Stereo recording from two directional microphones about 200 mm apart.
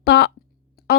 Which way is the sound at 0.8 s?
55° left (ahead or behind).